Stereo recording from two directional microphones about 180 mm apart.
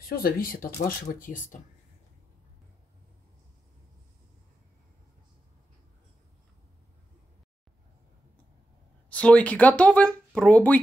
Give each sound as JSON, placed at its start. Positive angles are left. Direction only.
{"t": 0.1, "sound": "speech", "side_deg": 55}
{"t": 9.1, "sound": "speech", "side_deg": 5}